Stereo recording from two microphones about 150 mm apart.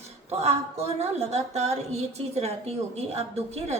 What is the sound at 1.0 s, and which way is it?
A woman's voice, 45° right (ahead or behind).